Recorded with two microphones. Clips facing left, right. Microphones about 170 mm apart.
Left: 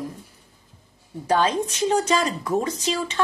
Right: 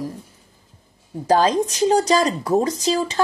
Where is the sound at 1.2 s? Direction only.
35° right (ahead or behind).